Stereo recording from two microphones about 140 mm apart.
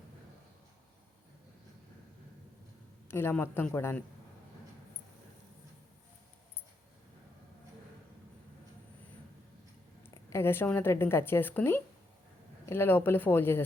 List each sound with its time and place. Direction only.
3.1 s a woman's voice: 15° left (ahead or behind)
10.2 s a woman's voice: 15° left (ahead or behind)